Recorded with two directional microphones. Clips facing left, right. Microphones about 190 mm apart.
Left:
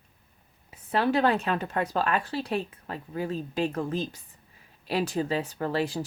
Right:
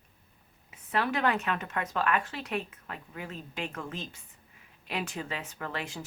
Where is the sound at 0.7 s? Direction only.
30° left (ahead or behind).